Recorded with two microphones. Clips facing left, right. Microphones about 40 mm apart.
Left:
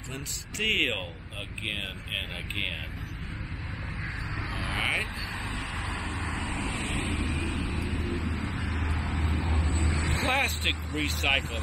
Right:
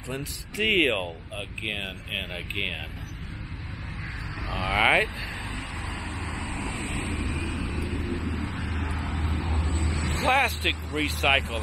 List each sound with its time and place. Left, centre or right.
0.1 s speech: centre
4.6 s speech: right
6.0 s vehicle: centre
6.7 s vehicle: left
7.8 s vehicle: centre
8.1 s vehicle: centre